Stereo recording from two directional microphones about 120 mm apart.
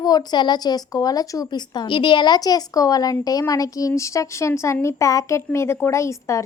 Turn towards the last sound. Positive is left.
turn(degrees=25)  # may be behind; listen again after turning